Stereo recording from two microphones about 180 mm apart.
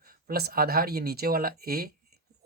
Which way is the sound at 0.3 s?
60° right (ahead or behind).